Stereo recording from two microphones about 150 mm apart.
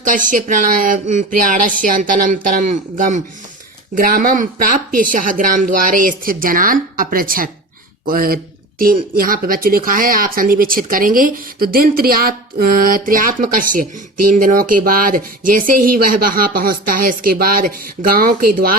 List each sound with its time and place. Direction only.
0.0 s speech: 60° right (ahead or behind)
3.9 s speech: 70° right (ahead or behind)